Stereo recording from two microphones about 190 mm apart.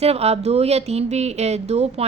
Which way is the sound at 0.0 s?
30° right (ahead or behind).